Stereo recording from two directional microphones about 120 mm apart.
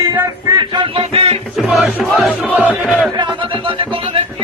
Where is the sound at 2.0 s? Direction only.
Centre (ahead or behind).